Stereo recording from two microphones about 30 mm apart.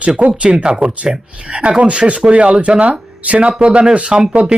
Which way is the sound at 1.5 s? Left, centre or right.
Right.